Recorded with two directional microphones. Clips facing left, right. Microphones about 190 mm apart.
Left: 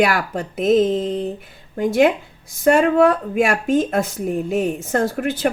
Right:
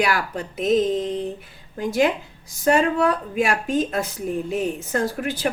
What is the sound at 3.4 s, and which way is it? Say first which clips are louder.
A woman's voice: left 4 dB; 50° left (ahead or behind).